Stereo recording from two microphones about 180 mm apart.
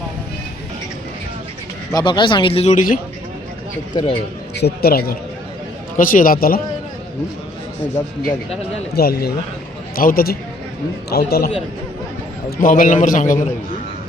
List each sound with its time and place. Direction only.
1.9 s speech: 25° left (ahead or behind); by 3.0 s 50° left (ahead or behind)
3.9 s speech: 30° left (ahead or behind)
4.5 s a man's voice: 65° left (ahead or behind)
9.0 s a man's voice: 60° left (ahead or behind)